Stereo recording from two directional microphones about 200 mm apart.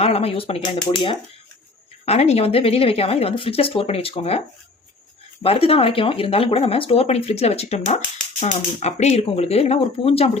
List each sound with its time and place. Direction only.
0.0 s speech: 30° left (ahead or behind)
2.0 s speech: 30° left (ahead or behind)